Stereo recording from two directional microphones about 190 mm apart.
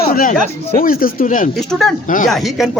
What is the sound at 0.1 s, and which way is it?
Speech, 50° left (ahead or behind).